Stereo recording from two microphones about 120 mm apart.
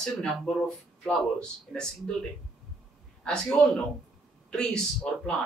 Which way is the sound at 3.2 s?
5° left (ahead or behind).